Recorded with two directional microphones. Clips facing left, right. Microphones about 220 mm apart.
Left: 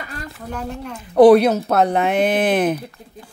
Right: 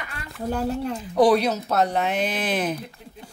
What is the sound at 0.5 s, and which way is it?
Speech, 30° right (ahead or behind).